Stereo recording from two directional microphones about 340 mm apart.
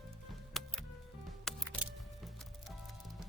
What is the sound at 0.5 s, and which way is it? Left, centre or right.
Music, centre.